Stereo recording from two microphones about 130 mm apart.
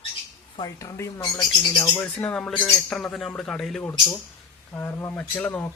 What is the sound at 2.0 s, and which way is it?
Speech, 10° left (ahead or behind).